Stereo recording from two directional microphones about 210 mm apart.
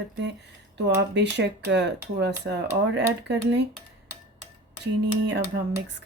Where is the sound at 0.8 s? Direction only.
55° right (ahead or behind).